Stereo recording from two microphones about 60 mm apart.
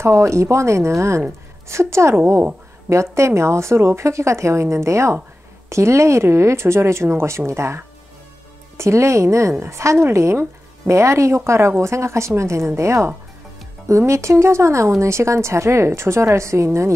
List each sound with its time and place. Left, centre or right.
0.0 s a woman's voice: right